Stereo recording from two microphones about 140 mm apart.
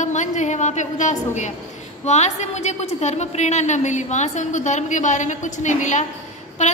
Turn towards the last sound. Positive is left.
turn(degrees=55)  # may be behind; listen again after turning